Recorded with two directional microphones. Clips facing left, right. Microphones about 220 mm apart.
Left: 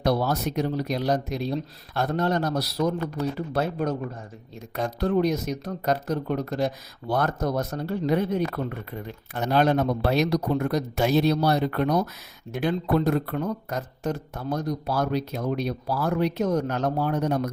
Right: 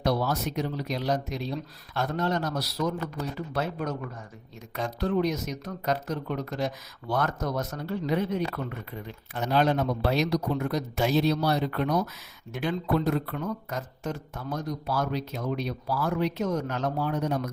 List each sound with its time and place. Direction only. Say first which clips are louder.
0.0 s speech: left 3 dB; 60° left (ahead or behind)
0.9 s speech: left 3 dB; 40° left (ahead or behind)
4.9 s speech: left 3 dB; 50° left (ahead or behind)
5.2 s speech: left 4 dB; 35° left (ahead or behind)
8.0 s speech: left 4 dB; 50° left (ahead or behind)
10.9 s speech: left 2 dB; 60° left (ahead or behind)